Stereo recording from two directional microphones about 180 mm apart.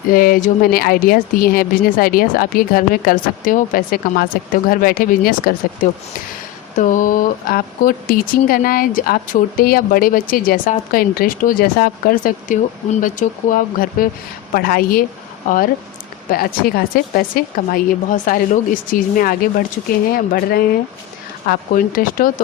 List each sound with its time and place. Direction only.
0.1 s speech: 55° left (ahead or behind)
6.7 s speech: 45° left (ahead or behind)